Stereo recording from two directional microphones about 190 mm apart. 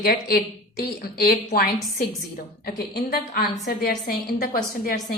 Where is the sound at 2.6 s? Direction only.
55° left (ahead or behind).